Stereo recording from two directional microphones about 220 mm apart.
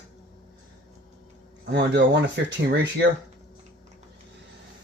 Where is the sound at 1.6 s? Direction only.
50° right (ahead or behind).